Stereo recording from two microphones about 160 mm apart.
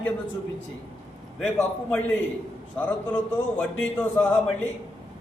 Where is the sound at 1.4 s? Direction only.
10° left (ahead or behind).